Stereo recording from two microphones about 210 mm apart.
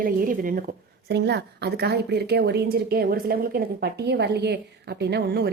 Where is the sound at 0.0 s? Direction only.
40° right (ahead or behind).